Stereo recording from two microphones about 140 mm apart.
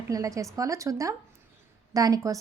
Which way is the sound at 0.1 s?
25° right (ahead or behind).